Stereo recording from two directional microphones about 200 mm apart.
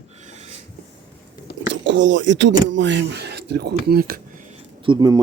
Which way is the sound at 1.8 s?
65° right (ahead or behind).